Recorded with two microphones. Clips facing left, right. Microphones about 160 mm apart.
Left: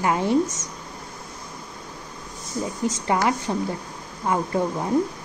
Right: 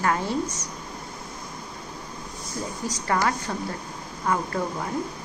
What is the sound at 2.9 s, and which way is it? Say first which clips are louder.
A woman's voice: left 2 dB; 25° left (ahead or behind).